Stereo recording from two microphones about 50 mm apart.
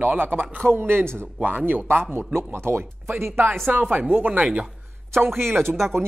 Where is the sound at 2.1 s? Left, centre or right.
Right.